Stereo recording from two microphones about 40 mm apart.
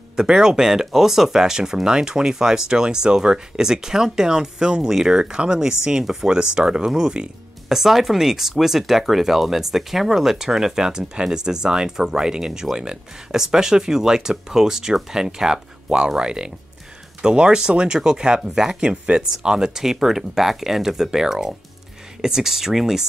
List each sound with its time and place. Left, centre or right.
0.1 s speech: centre
5.2 s speech: right